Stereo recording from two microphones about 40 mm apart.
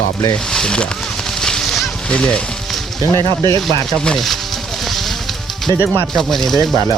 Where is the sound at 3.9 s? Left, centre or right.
Left.